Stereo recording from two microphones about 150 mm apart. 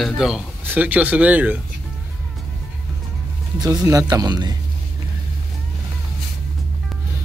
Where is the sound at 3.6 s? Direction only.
20° right (ahead or behind).